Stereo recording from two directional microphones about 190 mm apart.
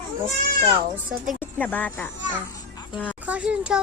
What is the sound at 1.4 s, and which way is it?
A child's voice, 10° left (ahead or behind).